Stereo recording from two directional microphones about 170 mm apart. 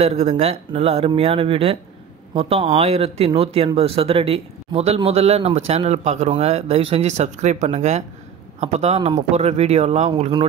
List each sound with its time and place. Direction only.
0.0 s speech: 40° right (ahead or behind)